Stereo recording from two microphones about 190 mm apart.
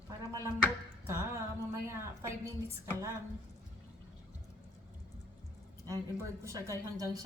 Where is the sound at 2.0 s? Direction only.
15° right (ahead or behind).